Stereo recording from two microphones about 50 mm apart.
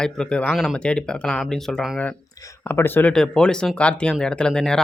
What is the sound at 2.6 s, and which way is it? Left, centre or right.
Speech, left.